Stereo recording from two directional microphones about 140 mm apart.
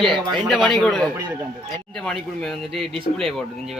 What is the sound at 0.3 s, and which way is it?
Speech, centre (ahead or behind).